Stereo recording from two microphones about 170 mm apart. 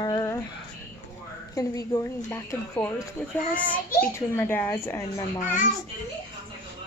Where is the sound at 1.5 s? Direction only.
20° left (ahead or behind).